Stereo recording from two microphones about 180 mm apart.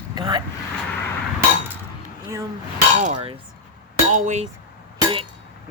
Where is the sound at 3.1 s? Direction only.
30° right (ahead or behind).